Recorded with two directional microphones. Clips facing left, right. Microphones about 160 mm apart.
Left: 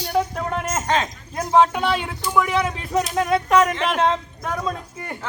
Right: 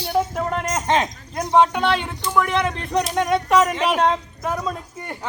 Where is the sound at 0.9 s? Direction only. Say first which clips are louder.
Right 2 dB; 20° right (ahead or behind).